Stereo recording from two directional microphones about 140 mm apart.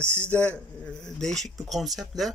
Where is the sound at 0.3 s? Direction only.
10° left (ahead or behind).